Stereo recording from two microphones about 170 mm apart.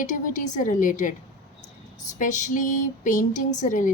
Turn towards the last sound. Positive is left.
turn(degrees=50)  # may be behind; listen again after turning